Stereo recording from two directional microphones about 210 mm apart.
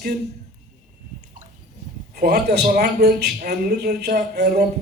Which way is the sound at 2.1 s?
50° right (ahead or behind).